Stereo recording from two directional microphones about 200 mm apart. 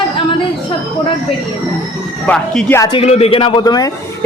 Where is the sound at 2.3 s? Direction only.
5° left (ahead or behind).